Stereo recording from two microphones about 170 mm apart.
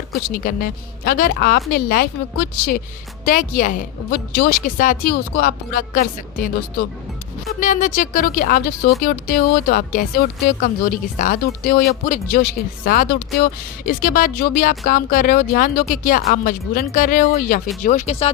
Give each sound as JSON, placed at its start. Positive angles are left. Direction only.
{"t": 0.3, "sound": "speech", "side_deg": 60}
{"t": 17.8, "sound": "speech", "side_deg": 45}